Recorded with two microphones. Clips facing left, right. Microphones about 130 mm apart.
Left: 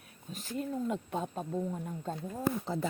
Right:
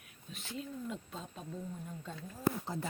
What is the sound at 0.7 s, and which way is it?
Speech, 65° left (ahead or behind).